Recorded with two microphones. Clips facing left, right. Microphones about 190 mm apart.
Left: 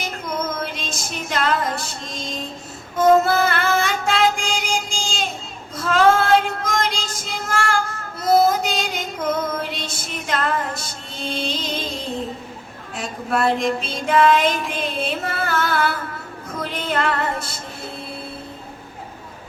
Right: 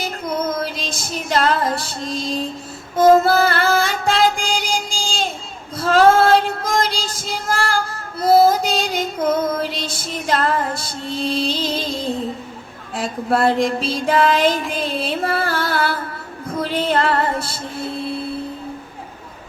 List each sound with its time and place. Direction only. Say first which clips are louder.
0.0 s female singing: right 4 dB; 35° right (ahead or behind)
3.0 s music: right 3 dB; 35° right (ahead or behind)
5.7 s child singing: right 3 dB; 35° right (ahead or behind)
13.0 s child singing: right 4 dB; 35° right (ahead or behind)
14.7 s music: right 2 dB; 35° right (ahead or behind)